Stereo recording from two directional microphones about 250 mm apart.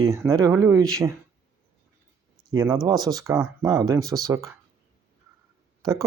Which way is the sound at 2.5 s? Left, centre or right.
Centre.